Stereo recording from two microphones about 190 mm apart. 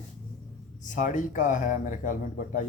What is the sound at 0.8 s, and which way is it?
Speech, 40° left (ahead or behind).